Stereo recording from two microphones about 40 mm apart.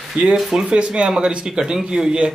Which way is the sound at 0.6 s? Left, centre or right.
Right.